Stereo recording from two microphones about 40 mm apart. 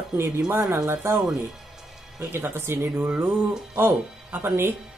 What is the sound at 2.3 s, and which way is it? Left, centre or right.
Speech, right.